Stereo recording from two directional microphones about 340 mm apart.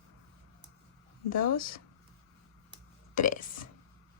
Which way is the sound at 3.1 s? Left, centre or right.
Left.